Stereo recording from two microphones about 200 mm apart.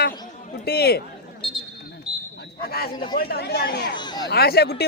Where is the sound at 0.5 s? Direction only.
55° left (ahead or behind).